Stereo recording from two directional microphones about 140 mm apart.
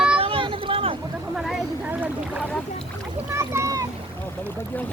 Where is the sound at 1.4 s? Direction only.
Centre (ahead or behind).